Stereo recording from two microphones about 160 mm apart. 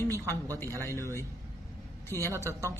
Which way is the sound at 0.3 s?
20° right (ahead or behind).